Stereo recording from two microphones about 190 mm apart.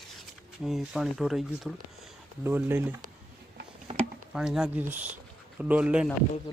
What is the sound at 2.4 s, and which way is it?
Speech, 10° right (ahead or behind).